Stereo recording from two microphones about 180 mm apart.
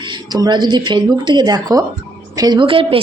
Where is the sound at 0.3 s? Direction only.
25° right (ahead or behind).